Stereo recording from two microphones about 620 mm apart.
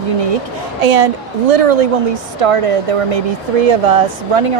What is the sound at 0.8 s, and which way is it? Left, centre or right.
Speech, right.